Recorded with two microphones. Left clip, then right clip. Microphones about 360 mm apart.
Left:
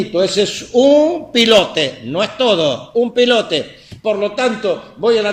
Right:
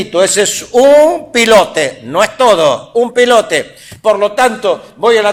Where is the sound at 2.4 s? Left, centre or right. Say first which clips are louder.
Right 5 dB; right.